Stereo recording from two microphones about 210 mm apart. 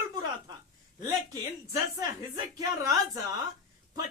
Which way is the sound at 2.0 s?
15° right (ahead or behind).